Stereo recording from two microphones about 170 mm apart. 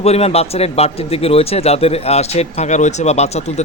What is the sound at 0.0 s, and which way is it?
Speech, 35° left (ahead or behind).